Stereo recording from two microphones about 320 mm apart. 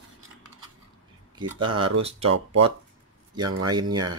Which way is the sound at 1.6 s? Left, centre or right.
Right.